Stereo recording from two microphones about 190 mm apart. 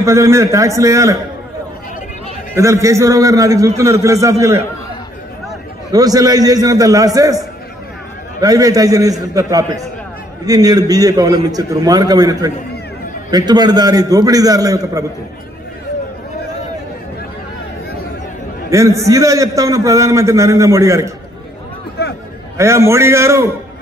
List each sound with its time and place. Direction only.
0.0 s a man's voice: 15° right (ahead or behind)
2.5 s a man's voice: 15° right (ahead or behind)
5.9 s a man's voice: 20° right (ahead or behind)
18.7 s a man's voice: 15° right (ahead or behind)
22.6 s a man's voice: 15° right (ahead or behind)